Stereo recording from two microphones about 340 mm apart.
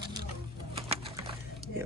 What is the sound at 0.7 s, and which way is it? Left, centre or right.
Sewing machine, centre.